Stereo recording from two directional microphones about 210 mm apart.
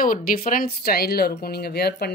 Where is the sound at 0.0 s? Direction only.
40° left (ahead or behind).